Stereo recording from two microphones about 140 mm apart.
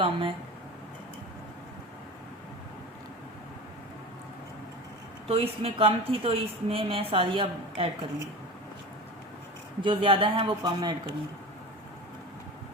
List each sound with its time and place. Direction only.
0.0 s a woman's voice: 40° right (ahead or behind)
5.3 s a woman's voice: 40° right (ahead or behind)
9.8 s a woman's voice: 40° right (ahead or behind)